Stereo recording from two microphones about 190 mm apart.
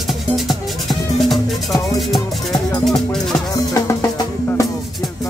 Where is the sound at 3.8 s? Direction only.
15° left (ahead or behind).